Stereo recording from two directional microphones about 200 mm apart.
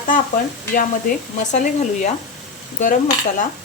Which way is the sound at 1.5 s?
35° left (ahead or behind).